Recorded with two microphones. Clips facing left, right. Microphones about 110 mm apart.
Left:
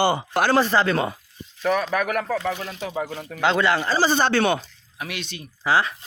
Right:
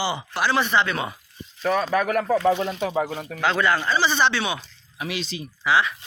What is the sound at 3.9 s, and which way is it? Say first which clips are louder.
Speech: left 1 dB; 40° left (ahead or behind).